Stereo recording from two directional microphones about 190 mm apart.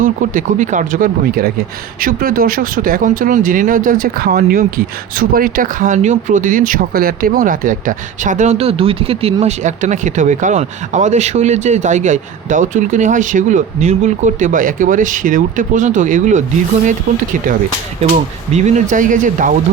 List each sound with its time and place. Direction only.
0.0 s speech: 45° right (ahead or behind)
18.1 s speech: 35° right (ahead or behind)